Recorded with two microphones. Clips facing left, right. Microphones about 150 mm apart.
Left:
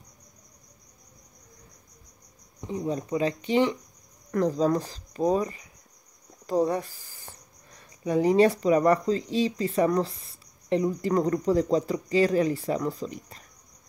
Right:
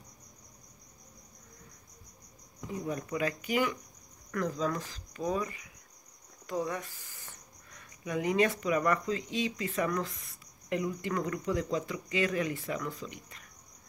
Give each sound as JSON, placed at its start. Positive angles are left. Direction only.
{"t": 2.6, "sound": "speech", "side_deg": 25}